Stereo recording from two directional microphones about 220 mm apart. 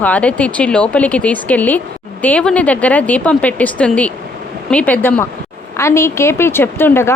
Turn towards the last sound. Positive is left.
turn(degrees=10)  # may be behind; listen again after turning